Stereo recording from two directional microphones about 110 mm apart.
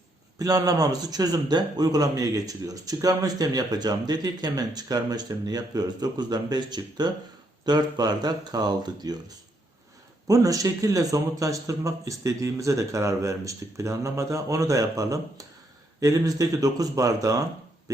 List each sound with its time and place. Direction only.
0.3 s a man's voice: 35° right (ahead or behind)
10.2 s a man's voice: 30° right (ahead or behind)